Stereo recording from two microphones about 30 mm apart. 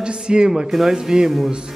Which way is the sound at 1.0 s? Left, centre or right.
Right.